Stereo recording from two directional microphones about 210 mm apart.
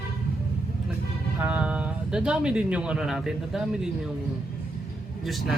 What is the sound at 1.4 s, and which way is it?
Speech, 5° right (ahead or behind).